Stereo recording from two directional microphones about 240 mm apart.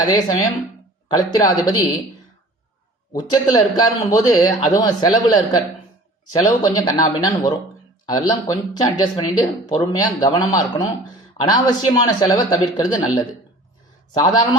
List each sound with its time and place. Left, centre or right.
0.2 s speech: centre
3.1 s speech: centre
14.1 s speech: centre